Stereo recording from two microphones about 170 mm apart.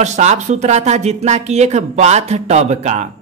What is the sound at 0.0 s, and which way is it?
A woman's voice, 45° right (ahead or behind).